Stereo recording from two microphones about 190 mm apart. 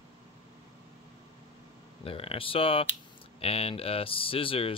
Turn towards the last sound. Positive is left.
turn(degrees=30)  # may be behind; listen again after turning